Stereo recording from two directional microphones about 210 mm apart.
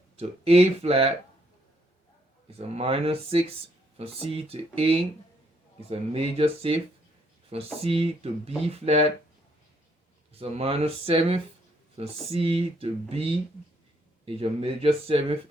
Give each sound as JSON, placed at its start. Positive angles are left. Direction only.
{"t": 0.2, "sound": "speech", "side_deg": -30}
{"t": 2.5, "sound": "speech", "side_deg": -30}
{"t": 10.3, "sound": "speech", "side_deg": -30}